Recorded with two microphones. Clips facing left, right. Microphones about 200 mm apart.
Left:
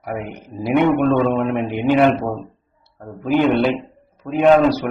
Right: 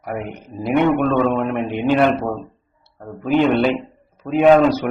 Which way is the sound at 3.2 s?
Centre (ahead or behind).